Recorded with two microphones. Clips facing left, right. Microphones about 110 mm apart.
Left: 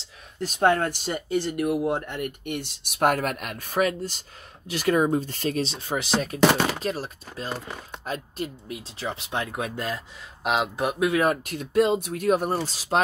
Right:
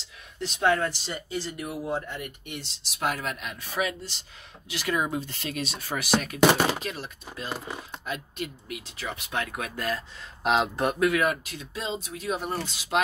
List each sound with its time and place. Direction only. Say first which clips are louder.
0.4 s speech: left 3 dB; 45° left (ahead or behind)
7.5 s speech: even; 5° right (ahead or behind)
8.0 s speech: left 5 dB; 35° left (ahead or behind)
10.4 s speech: right 1 dB; 5° left (ahead or behind)
11.0 s speech: left 2 dB; 25° left (ahead or behind)
11.2 s speech: left 4 dB; 50° left (ahead or behind)
12.6 s speech: left 3 dB; 35° left (ahead or behind)